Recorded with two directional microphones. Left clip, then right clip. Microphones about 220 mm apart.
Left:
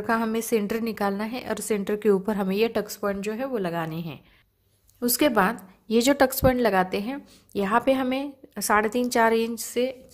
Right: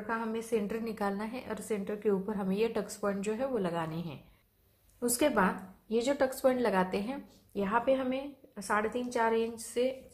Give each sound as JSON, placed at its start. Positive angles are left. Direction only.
{"t": 0.0, "sound": "a woman's voice", "side_deg": 45}